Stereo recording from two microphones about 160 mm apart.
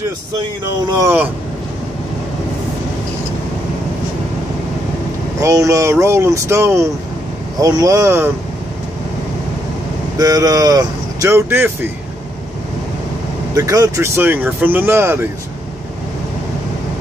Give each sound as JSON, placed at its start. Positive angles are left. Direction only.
{"t": 0.9, "sound": "speech", "side_deg": -15}
{"t": 5.4, "sound": "speech", "side_deg": -20}
{"t": 10.1, "sound": "speech", "side_deg": -20}
{"t": 13.6, "sound": "speech", "side_deg": -20}